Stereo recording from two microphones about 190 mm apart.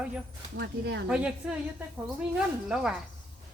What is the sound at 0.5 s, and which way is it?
Speech, 60° right (ahead or behind).